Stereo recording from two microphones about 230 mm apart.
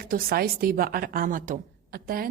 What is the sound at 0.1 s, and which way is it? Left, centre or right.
A woman's voice, right.